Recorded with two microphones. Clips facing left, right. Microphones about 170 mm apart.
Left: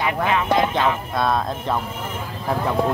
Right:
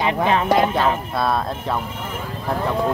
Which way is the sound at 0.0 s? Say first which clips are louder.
Right 2 dB; 25° right (ahead or behind).